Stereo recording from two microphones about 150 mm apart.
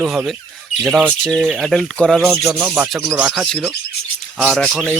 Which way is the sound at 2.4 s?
10° right (ahead or behind).